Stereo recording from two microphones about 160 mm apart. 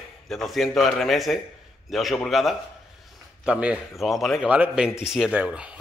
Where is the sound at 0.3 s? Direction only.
Centre (ahead or behind).